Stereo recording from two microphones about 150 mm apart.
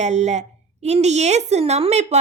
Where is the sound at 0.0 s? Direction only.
50° right (ahead or behind).